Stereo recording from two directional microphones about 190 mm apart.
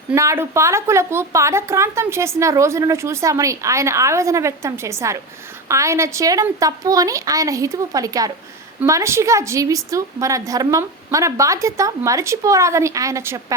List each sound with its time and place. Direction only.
0.1 s a woman's voice: 15° right (ahead or behind)